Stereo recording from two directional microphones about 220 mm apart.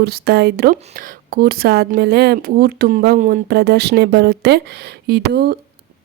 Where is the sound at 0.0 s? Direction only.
45° right (ahead or behind).